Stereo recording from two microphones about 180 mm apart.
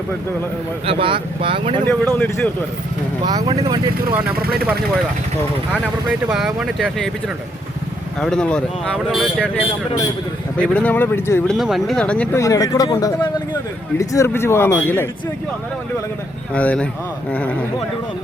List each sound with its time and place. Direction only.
0.9 s speech: 30° right (ahead or behind)
1.9 s speech: 5° left (ahead or behind)
3.2 s speech: 25° right (ahead or behind)
6.3 s speech: 5° right (ahead or behind)
8.2 s speech: 5° left (ahead or behind)
11.5 s speech: centre (ahead or behind)
16.6 s speech: 5° left (ahead or behind)